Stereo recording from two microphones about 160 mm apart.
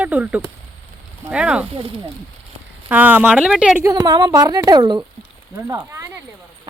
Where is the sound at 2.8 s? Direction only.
10° right (ahead or behind).